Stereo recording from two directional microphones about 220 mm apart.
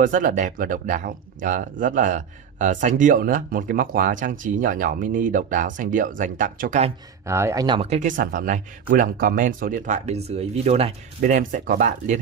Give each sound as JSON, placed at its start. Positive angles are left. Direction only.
{"t": 0.0, "sound": "speech", "side_deg": -35}
{"t": 7.2, "sound": "speech", "side_deg": -10}